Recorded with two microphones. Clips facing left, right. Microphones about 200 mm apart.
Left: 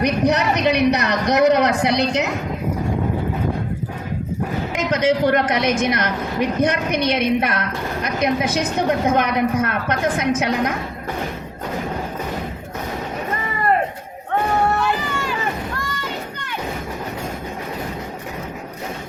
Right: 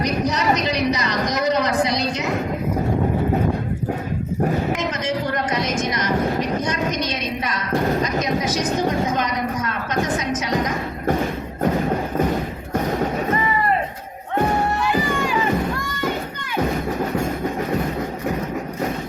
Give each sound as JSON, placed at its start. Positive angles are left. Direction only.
{"t": 0.0, "sound": "a woman's voice", "side_deg": 65}
{"t": 4.9, "sound": "a woman's voice", "side_deg": 80}